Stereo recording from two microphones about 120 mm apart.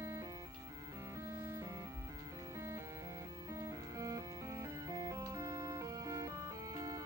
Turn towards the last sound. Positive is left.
turn(degrees=-30)  # may be behind; listen again after turning